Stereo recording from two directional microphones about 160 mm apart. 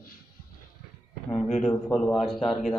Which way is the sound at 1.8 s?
10° left (ahead or behind).